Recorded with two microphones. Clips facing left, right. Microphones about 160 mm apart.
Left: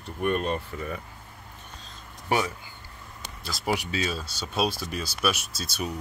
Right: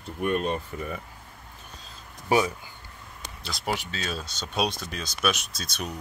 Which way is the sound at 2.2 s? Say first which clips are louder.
Right 3 dB; 15° right (ahead or behind).